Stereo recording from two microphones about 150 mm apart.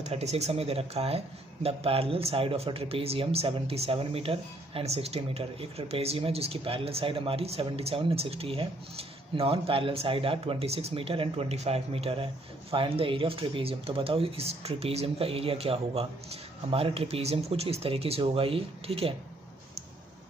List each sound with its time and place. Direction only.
0.0 s speech: 45° right (ahead or behind)